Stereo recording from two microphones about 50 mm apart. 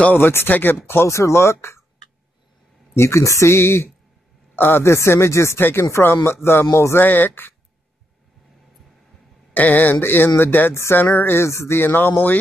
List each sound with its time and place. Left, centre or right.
0.1 s speech: left
1.0 s speech: left
2.9 s speech: left
4.6 s speech: left
4.8 s speech: left
7.0 s speech: left
9.5 s speech: left
9.9 s speech: left
10.7 s speech: left